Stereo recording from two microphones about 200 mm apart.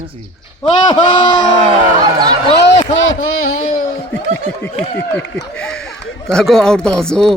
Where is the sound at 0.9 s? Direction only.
20° left (ahead or behind).